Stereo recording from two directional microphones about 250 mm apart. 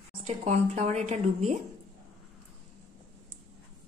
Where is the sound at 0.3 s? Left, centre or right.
Right.